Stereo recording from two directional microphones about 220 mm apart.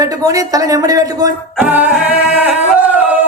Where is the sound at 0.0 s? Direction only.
15° right (ahead or behind).